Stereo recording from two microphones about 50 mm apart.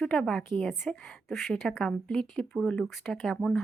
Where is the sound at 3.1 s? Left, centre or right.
Centre.